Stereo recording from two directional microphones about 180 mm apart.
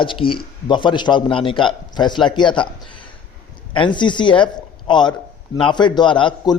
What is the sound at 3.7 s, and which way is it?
A man's voice, 25° left (ahead or behind).